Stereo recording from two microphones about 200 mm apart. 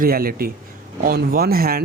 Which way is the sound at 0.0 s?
45° right (ahead or behind).